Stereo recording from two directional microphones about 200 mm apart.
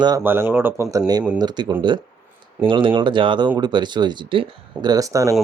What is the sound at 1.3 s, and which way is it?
Speech, 20° right (ahead or behind).